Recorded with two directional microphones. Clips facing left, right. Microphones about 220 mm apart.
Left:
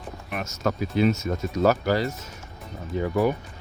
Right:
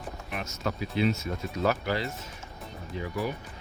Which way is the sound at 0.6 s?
45° left (ahead or behind).